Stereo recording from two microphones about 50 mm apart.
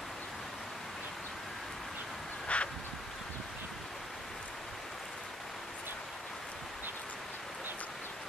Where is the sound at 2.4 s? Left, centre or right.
Left.